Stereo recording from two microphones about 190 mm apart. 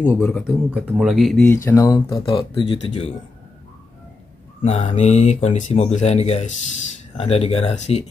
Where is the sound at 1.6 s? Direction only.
15° left (ahead or behind).